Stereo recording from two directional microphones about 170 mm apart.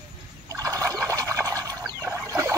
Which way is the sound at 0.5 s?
20° right (ahead or behind).